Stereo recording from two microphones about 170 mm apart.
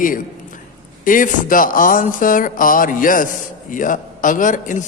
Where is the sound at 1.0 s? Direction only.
50° left (ahead or behind).